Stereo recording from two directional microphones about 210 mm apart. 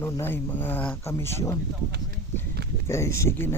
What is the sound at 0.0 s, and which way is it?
Speech, 10° left (ahead or behind).